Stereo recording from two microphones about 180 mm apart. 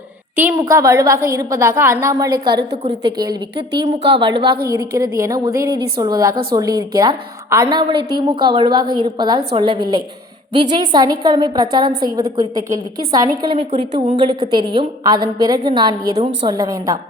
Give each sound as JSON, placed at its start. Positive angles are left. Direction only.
{"t": 0.7, "sound": "a woman's voice", "side_deg": -15}
{"t": 4.4, "sound": "a woman's voice", "side_deg": -60}
{"t": 5.1, "sound": "a woman's voice", "side_deg": -15}